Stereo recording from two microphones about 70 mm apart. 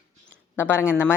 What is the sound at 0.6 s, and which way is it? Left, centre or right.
Speech, left.